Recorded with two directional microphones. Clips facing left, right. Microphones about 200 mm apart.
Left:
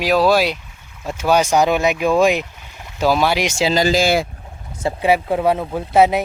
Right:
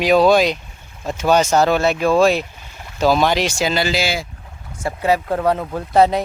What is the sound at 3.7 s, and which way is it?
Speech, 40° left (ahead or behind).